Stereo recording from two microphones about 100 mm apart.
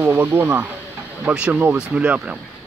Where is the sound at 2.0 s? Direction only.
15° right (ahead or behind).